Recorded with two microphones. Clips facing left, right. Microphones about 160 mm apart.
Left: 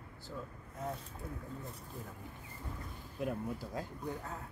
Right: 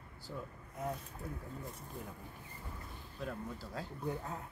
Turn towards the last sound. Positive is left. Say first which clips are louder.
# left 4 dB
turn(degrees=15)  # may be behind; listen again after turning